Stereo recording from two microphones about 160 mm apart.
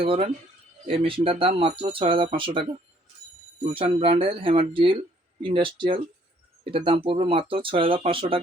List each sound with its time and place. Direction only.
0.0 s speech: 35° right (ahead or behind)
3.7 s speech: 35° right (ahead or behind)